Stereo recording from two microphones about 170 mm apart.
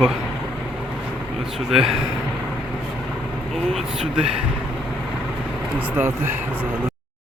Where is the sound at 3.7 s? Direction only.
5° right (ahead or behind).